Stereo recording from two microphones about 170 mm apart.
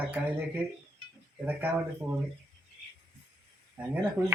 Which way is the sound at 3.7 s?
10° right (ahead or behind).